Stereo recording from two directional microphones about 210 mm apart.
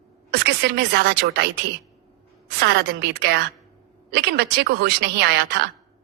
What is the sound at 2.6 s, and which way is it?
Speech, 50° right (ahead or behind).